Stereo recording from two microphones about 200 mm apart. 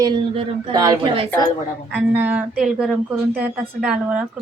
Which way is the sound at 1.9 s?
10° right (ahead or behind).